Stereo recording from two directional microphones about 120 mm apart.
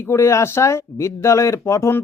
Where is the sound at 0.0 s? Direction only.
25° left (ahead or behind).